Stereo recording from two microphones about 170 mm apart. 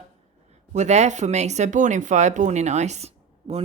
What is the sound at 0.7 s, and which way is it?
Speech, 40° right (ahead or behind).